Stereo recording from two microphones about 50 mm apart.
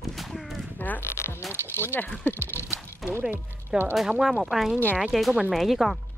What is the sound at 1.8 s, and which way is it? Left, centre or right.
Speech, left.